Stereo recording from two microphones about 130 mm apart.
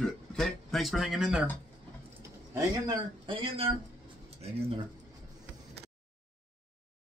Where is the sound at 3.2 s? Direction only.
45° right (ahead or behind).